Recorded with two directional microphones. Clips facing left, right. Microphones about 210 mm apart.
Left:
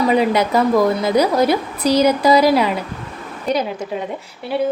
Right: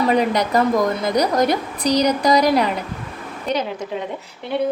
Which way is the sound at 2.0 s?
5° left (ahead or behind).